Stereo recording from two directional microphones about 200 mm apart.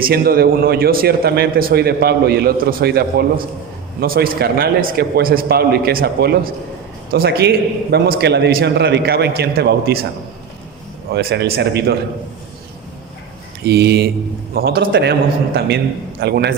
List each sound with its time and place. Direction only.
0.0 s a man's voice: 50° right (ahead or behind)
11.1 s a man's voice: 55° right (ahead or behind)
13.7 s a man's voice: 55° right (ahead or behind)